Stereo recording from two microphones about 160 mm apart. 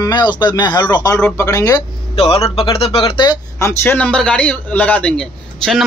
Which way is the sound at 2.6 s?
35° left (ahead or behind).